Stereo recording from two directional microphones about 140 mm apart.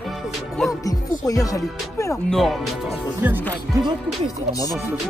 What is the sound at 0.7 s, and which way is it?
Speech, 25° left (ahead or behind).